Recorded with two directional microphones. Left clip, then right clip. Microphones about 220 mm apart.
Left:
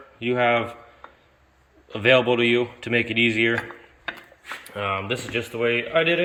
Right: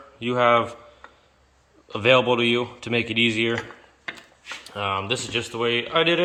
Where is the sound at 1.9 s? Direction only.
10° right (ahead or behind).